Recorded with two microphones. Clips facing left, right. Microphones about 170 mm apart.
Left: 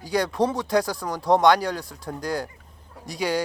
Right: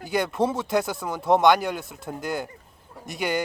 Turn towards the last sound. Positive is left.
turn(degrees=0)  # may be behind; listen again after turning